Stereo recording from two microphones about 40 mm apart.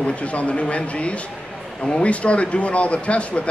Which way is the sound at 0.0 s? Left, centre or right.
Left.